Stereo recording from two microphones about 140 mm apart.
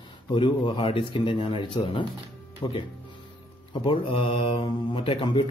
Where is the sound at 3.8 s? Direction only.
40° left (ahead or behind).